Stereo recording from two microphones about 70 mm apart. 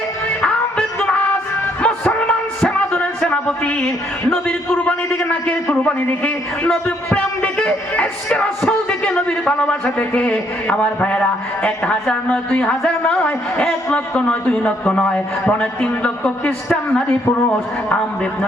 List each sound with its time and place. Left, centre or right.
1.0 s music: centre
1.8 s a sound: centre
6.0 s a man's voice: left
6.6 s a woman's voice: centre